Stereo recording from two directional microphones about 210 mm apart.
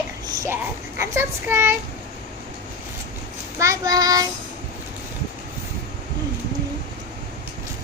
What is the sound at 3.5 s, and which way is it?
Speech, 15° right (ahead or behind).